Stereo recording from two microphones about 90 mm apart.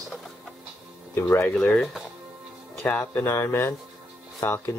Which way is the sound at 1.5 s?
10° left (ahead or behind).